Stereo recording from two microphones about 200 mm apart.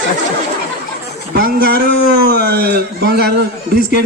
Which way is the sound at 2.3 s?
50° right (ahead or behind).